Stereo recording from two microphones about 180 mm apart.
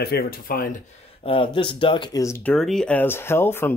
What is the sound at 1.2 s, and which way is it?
Speech, 30° left (ahead or behind).